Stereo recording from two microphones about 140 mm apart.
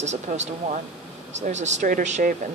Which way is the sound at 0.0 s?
55° right (ahead or behind).